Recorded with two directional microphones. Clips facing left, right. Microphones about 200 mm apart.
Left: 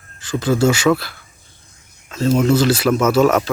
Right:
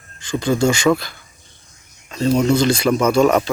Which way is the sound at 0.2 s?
5° left (ahead or behind).